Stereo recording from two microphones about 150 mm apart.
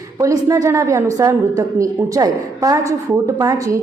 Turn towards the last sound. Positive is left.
turn(degrees=-20)  # may be behind; listen again after turning